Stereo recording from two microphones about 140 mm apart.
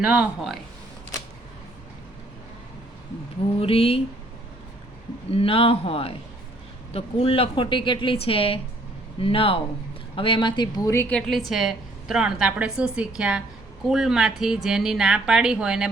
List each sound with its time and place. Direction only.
0.0 s speech: 10° right (ahead or behind)
3.6 s a woman's voice: 45° left (ahead or behind)
5.3 s a woman's voice: 40° left (ahead or behind)
10.8 s a woman's voice: 20° left (ahead or behind)
11.1 s a woman's voice: centre (ahead or behind)